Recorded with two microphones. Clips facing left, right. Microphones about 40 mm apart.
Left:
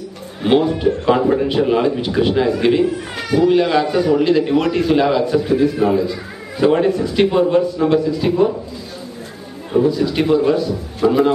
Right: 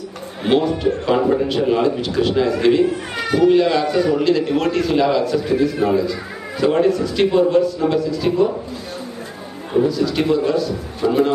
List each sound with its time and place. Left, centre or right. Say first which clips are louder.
0.4 s a sound: left 2 dB; centre
0.8 s a man's voice: left 2 dB; centre
9.8 s a man's voice: left 2 dB; left
11.1 s a man's voice: left 2 dB; centre